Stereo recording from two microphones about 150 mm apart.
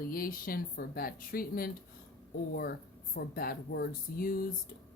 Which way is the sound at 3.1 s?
85° left.